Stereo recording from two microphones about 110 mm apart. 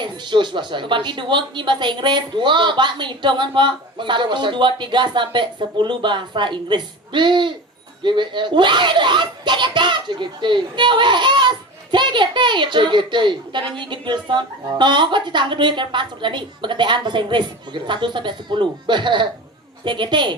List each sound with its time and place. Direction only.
0.0 s speech: 45° right (ahead or behind)